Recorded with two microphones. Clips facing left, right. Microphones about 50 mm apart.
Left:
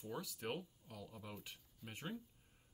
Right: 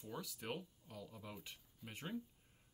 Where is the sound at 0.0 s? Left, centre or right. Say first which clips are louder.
Left 2 dB; centre.